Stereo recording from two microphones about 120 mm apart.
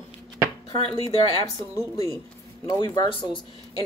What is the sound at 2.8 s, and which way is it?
Speech, 40° left (ahead or behind).